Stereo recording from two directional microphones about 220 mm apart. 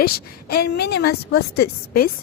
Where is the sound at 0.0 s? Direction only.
45° left (ahead or behind).